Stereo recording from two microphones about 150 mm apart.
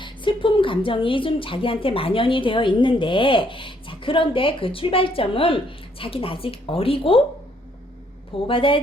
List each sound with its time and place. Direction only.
0.0 s a woman's voice: 35° left (ahead or behind)
8.4 s a woman's voice: 35° left (ahead or behind)